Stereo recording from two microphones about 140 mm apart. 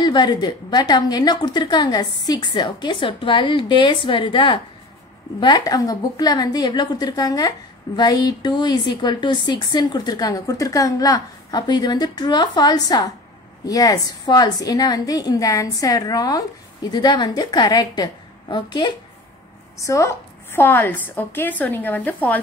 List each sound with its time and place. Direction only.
0.0 s a woman's voice: 30° left (ahead or behind)
19.8 s a woman's voice: 20° left (ahead or behind)